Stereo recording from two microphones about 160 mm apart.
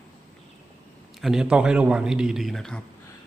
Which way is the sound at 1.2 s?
5° right (ahead or behind).